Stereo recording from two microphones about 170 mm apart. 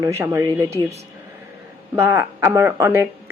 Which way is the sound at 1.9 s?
15° right (ahead or behind).